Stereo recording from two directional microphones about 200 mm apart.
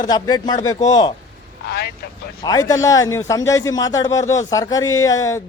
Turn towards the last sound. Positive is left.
turn(degrees=15)  # may be behind; listen again after turning